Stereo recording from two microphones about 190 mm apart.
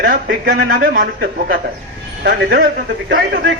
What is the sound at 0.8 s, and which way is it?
A man's voice, 50° right (ahead or behind).